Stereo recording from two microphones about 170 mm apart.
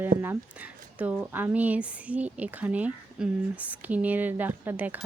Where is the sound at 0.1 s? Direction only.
55° right (ahead or behind).